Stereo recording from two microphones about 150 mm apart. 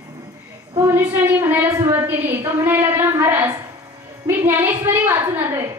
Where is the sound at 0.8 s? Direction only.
15° right (ahead or behind).